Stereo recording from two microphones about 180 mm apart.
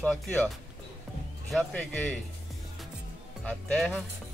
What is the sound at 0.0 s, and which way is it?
Speech, 5° left (ahead or behind).